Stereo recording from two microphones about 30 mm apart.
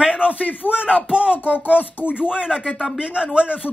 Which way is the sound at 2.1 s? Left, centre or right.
Right.